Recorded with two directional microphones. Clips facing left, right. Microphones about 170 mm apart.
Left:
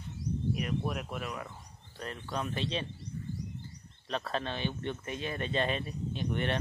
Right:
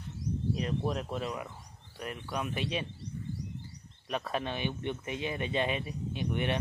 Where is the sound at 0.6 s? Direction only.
30° right (ahead or behind).